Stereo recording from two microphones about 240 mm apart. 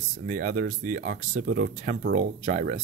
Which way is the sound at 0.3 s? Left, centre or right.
Right.